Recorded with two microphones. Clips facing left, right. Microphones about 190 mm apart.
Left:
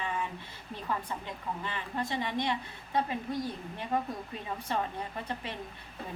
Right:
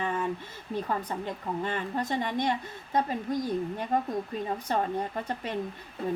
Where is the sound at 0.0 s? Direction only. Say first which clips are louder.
Right 4 dB; 45° right (ahead or behind).